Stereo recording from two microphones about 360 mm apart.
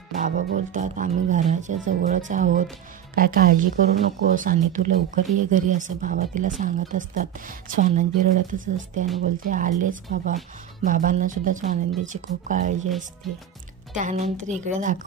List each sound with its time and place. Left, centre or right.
0.2 s speech: right
13.9 s speech: right